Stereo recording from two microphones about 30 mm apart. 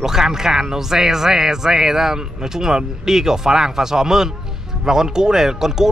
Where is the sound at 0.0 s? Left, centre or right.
Centre.